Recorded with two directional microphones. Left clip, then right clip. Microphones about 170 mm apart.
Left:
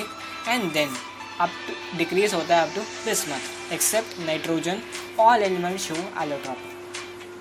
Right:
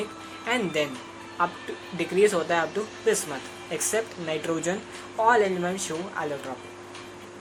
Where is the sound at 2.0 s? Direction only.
25° left (ahead or behind).